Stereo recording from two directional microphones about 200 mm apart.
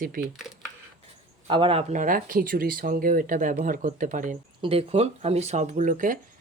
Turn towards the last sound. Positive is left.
turn(degrees=-40)  # may be behind; listen again after turning